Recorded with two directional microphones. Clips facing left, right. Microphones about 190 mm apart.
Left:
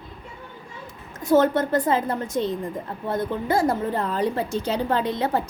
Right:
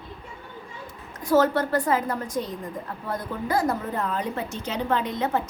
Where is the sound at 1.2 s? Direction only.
20° left (ahead or behind).